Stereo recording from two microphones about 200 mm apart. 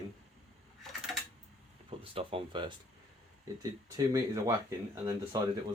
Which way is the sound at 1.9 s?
25° right (ahead or behind).